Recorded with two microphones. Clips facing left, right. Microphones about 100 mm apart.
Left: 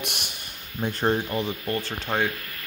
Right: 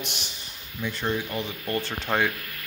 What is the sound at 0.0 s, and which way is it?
Speech, 55° left (ahead or behind).